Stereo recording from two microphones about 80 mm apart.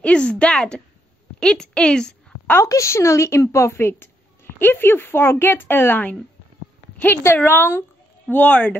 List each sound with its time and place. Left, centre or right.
0.0 s a woman's voice: centre
2.5 s a woman's voice: left; by 8.7 s centre